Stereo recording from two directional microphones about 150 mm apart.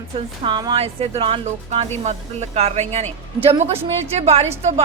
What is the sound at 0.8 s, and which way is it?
A woman's voice, 40° right (ahead or behind).